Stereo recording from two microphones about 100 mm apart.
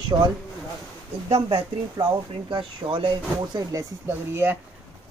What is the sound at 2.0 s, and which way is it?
Speech, 40° right (ahead or behind).